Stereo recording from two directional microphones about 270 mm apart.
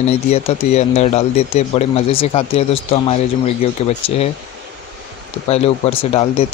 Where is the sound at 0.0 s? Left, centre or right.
Left.